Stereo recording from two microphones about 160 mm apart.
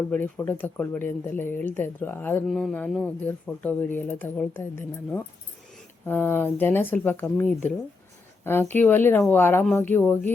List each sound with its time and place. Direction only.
0.1 s speech: 10° left (ahead or behind)
2.5 s speech: centre (ahead or behind)